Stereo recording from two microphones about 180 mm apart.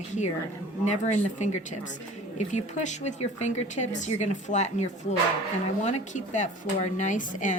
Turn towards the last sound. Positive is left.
turn(degrees=45)  # may be behind; listen again after turning